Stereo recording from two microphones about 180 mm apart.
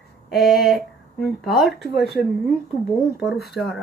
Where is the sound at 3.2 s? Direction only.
Centre (ahead or behind).